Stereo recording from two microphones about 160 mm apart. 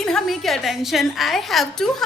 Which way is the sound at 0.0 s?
5° left (ahead or behind).